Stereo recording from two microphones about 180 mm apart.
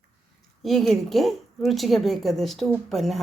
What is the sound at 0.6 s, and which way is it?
A woman's voice, centre (ahead or behind).